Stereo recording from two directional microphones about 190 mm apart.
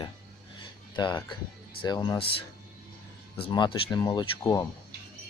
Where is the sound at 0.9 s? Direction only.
20° left (ahead or behind).